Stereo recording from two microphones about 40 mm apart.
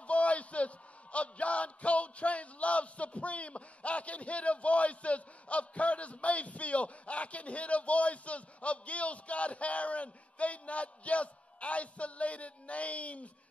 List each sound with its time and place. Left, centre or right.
0.0 s a man's voice: left